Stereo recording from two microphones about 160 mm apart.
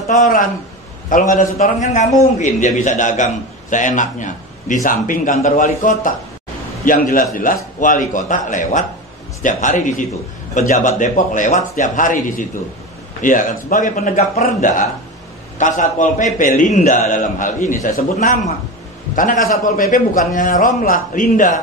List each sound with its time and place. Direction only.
0.1 s a man's voice: 55° left (ahead or behind)